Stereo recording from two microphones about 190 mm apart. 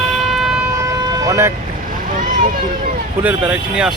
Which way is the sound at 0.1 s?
Centre (ahead or behind).